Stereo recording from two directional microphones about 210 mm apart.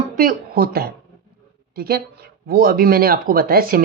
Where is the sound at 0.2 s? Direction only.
45° right (ahead or behind).